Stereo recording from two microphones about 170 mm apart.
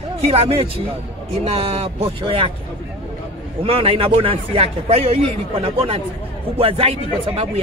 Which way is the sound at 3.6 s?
35° right (ahead or behind).